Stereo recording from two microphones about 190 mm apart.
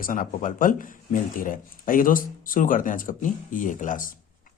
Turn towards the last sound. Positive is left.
turn(degrees=45)  # may be behind; listen again after turning